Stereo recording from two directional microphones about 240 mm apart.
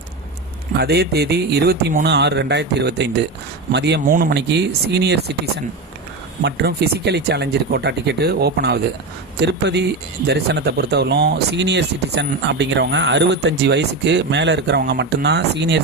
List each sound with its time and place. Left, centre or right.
0.8 s speech: right
6.4 s speech: right